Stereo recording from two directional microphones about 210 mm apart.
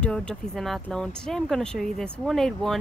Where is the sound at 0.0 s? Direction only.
5° left (ahead or behind).